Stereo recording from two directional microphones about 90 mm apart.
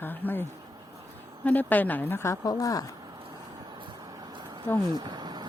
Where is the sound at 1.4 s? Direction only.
20° left (ahead or behind); by 2.8 s 40° left (ahead or behind).